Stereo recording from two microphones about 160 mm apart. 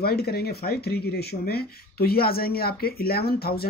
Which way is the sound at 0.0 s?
75° left (ahead or behind).